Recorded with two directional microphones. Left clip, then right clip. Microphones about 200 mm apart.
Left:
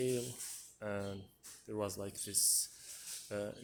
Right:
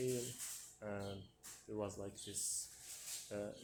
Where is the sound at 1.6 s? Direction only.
50° left (ahead or behind).